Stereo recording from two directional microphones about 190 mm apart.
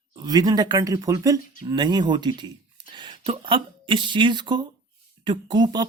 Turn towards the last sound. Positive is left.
turn(degrees=-20)  # may be behind; listen again after turning